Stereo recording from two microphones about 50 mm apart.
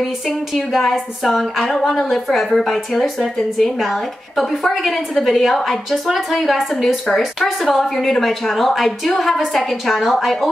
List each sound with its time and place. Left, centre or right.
0.7 s a woman's voice: centre